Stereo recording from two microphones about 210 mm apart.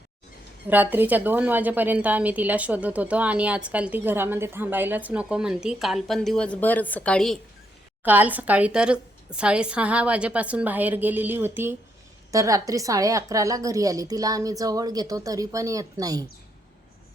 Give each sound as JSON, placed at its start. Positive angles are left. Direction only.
{"t": 0.7, "sound": "a woman's voice", "side_deg": -10}
{"t": 8.0, "sound": "a woman's voice", "side_deg": -10}